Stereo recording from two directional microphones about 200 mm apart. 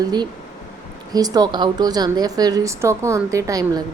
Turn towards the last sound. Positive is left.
turn(degrees=-15)  # may be behind; listen again after turning